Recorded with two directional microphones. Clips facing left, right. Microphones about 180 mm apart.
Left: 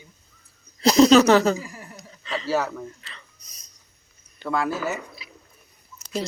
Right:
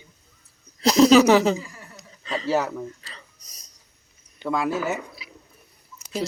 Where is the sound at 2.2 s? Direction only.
40° right (ahead or behind).